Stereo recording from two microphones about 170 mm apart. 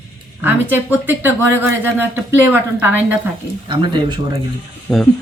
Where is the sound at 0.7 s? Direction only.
10° right (ahead or behind).